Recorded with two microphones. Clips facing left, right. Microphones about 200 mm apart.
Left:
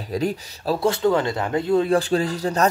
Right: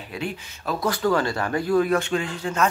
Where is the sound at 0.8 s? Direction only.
25° left (ahead or behind).